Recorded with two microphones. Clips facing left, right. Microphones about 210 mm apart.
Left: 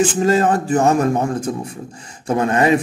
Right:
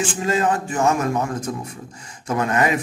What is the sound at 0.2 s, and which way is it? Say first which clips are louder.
A man's voice: left 5 dB; 40° left (ahead or behind).